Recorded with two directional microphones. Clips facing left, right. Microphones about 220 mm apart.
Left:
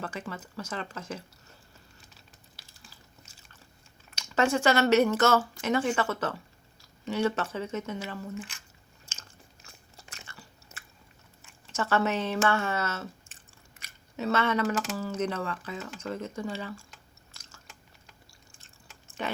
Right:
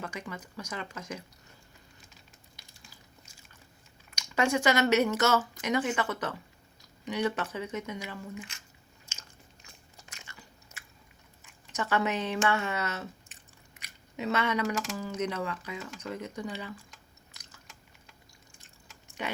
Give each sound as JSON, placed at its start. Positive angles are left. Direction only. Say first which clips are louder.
{"t": 0.0, "sound": "speech", "louder": "left 2 dB", "side_deg": -15}
{"t": 3.3, "sound": "a sound", "louder": "right 1 dB", "side_deg": -15}
{"t": 4.1, "sound": "speech", "louder": "left 2 dB", "side_deg": -15}
{"t": 9.6, "sound": "biting", "louder": "left 3 dB", "side_deg": -15}
{"t": 11.4, "sound": "speech", "louder": "left 2 dB", "side_deg": -15}
{"t": 18.5, "sound": "chewing", "louder": "even", "side_deg": -15}